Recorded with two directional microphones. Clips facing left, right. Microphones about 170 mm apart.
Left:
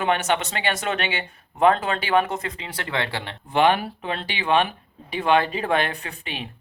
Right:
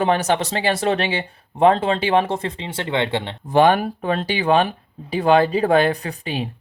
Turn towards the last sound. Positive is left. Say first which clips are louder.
# right 8 dB
turn(degrees=-35)  # may be behind; listen again after turning